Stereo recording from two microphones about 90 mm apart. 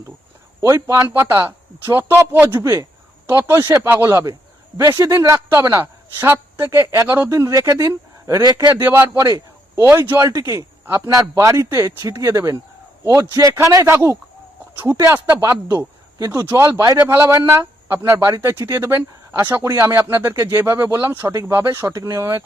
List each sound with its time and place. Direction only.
0.6 s a man's voice: 35° right (ahead or behind)
8.4 s a man's voice: 45° right (ahead or behind)
8.7 s speech: 25° right (ahead or behind)
9.2 s a sound: 40° right (ahead or behind)
9.8 s speech: 25° right (ahead or behind)
10.2 s a man's voice: 40° right (ahead or behind)
17.1 s speech: 30° right (ahead or behind)